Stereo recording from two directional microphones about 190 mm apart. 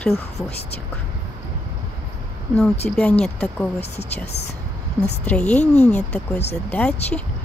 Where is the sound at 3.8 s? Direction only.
35° left (ahead or behind).